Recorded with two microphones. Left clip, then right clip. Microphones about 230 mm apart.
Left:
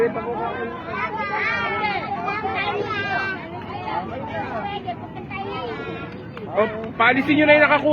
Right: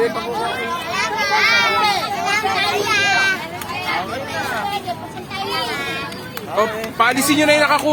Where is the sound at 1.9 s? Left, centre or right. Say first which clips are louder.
Right 6 dB; right.